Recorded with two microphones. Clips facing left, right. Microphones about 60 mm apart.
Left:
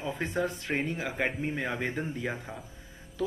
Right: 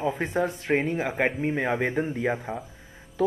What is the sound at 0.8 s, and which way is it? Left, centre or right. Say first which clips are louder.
Speech: right 6 dB; right.